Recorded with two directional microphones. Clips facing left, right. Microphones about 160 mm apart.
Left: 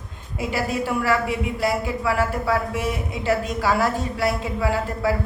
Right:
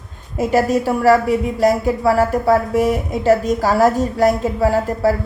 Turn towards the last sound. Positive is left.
turn(degrees=-40)  # may be behind; listen again after turning